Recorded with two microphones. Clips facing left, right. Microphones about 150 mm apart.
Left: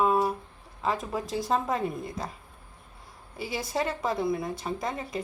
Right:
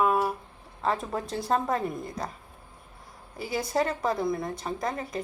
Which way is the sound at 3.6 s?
Centre (ahead or behind).